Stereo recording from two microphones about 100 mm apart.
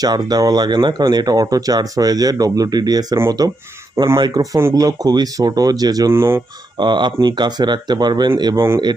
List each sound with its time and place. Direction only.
0.0 s speech: 40° right (ahead or behind); by 6.4 s 25° right (ahead or behind)
6.7 s speech: 50° right (ahead or behind)